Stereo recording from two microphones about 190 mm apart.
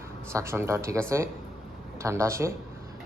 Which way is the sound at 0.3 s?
15° right (ahead or behind).